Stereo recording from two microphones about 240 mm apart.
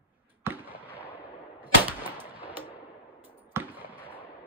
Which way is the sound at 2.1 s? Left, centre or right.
Centre.